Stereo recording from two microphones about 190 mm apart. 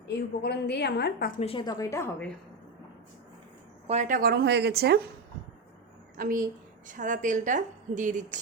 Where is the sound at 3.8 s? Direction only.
40° right (ahead or behind); by 5.0 s 60° right (ahead or behind).